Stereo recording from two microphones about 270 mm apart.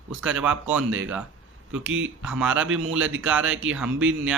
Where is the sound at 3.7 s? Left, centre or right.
Centre.